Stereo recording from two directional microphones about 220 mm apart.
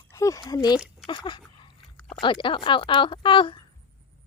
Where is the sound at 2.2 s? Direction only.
20° left (ahead or behind).